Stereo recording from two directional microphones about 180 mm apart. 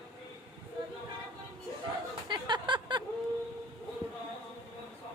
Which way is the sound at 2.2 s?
25° right (ahead or behind).